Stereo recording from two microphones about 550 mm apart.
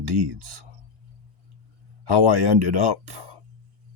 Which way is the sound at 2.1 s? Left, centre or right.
Right.